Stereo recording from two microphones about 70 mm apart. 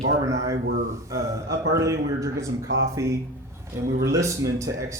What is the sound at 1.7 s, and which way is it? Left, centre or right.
Speech, right.